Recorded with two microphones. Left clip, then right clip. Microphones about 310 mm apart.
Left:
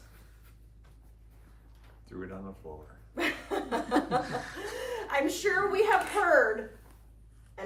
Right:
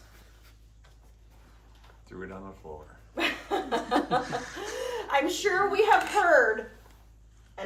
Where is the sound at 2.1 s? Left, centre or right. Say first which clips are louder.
Right 1 dB; centre.